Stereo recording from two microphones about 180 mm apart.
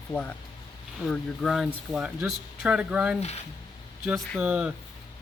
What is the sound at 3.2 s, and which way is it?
Speech, 35° left (ahead or behind).